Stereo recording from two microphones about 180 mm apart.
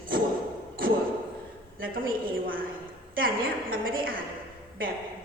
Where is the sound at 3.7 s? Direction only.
50° right (ahead or behind).